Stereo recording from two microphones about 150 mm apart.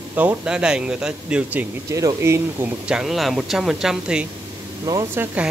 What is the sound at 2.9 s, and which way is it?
Speech, centre (ahead or behind).